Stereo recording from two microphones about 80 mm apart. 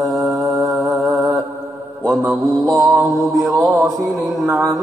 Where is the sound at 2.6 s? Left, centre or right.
Right.